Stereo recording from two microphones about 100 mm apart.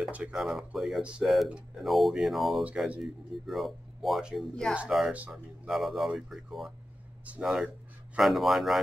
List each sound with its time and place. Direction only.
0.0 s speech: 15° right (ahead or behind)
0.3 s speech: 5° right (ahead or behind)